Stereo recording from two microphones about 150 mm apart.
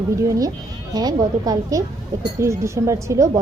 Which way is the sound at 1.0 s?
25° right (ahead or behind).